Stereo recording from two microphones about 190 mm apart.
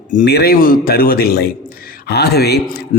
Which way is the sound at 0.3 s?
55° left (ahead or behind).